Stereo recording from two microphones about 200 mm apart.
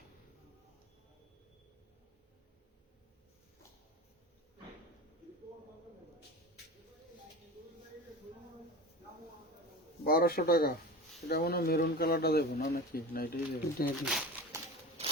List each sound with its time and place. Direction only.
10.0 s speech: 50° left (ahead or behind)
14.0 s speech: centre (ahead or behind)